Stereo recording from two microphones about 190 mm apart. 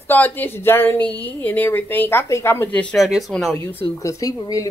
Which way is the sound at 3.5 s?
15° left (ahead or behind).